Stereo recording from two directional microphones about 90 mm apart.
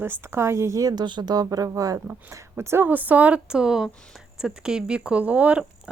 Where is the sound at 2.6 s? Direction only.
25° right (ahead or behind).